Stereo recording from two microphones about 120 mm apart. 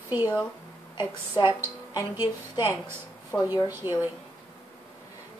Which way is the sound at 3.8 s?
40° left (ahead or behind).